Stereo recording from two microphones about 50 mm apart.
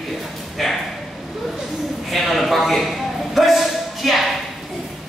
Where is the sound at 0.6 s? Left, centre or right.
Centre.